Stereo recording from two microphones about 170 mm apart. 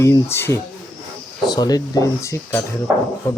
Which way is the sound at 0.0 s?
15° left (ahead or behind).